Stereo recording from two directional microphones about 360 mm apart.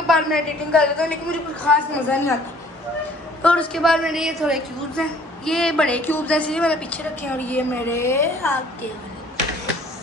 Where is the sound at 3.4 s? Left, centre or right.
Centre.